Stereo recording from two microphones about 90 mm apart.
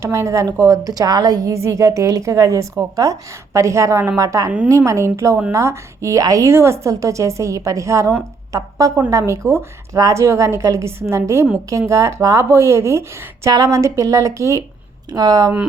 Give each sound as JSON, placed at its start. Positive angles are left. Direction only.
{"t": 0.0, "sound": "a woman's voice", "side_deg": -35}
{"t": 1.5, "sound": "speech", "side_deg": -35}
{"t": 15.1, "sound": "a woman's voice", "side_deg": -45}